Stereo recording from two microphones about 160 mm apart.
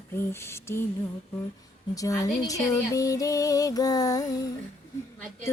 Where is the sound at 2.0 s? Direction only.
20° left (ahead or behind).